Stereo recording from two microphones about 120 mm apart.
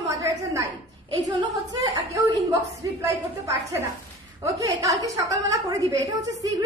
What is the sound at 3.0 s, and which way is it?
Speech, 25° right (ahead or behind).